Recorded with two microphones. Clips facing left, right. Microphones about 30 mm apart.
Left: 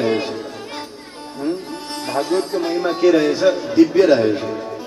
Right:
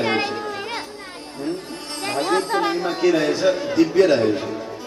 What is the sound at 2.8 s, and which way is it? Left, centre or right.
A man's voice, centre.